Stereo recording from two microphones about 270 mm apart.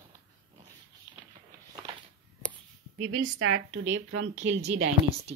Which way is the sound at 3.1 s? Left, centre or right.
Right.